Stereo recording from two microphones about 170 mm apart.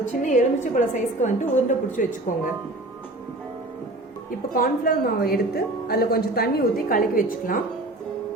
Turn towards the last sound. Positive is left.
turn(degrees=55)  # may be behind; listen again after turning